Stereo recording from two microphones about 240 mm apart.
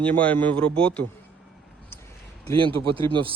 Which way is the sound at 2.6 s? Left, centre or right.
Right.